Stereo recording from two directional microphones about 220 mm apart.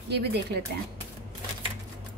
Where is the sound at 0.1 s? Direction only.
50° right (ahead or behind).